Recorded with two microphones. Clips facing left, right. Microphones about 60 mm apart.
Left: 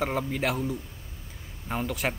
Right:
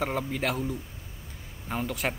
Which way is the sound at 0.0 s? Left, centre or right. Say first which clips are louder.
Left 1 dB; centre.